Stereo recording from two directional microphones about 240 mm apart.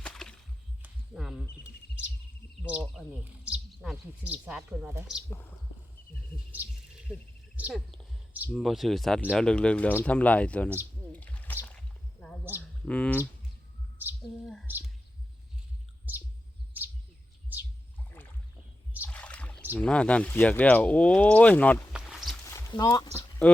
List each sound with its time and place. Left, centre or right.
0.0 s whip: centre
0.8 s heart sounds: centre
2.6 s speech: centre
6.5 s speech: centre
11.1 s a sound: centre
12.5 s a sound: centre
12.9 s speech: centre
14.3 s speech: centre
16.1 s bird: centre
17.5 s whale vocalization: centre
19.0 s a sound: centre
19.7 s speech: centre
22.4 s a sound: centre
23.4 s speech: centre